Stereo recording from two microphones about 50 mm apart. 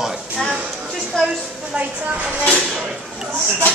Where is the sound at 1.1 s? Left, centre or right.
Centre.